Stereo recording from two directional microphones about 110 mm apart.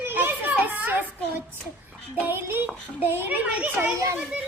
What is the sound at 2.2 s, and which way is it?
A child's voice, 20° right (ahead or behind).